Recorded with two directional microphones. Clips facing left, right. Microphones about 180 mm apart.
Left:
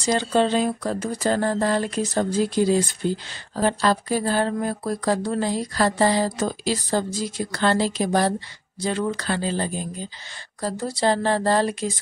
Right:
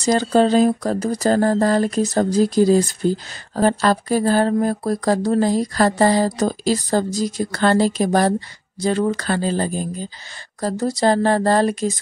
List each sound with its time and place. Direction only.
0.0 s speech: 40° right (ahead or behind)